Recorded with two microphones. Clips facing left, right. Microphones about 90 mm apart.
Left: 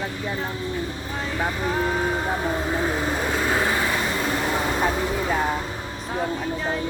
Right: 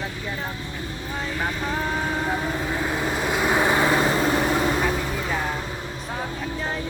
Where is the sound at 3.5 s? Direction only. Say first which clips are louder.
Right 6 dB; 20° right (ahead or behind).